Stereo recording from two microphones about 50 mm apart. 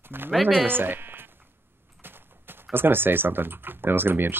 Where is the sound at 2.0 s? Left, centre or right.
Right.